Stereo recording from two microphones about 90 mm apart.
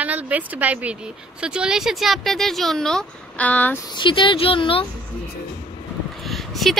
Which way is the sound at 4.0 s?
65° left (ahead or behind).